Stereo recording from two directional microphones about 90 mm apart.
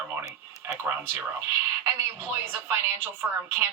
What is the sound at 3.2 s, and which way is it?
Speech, 10° right (ahead or behind).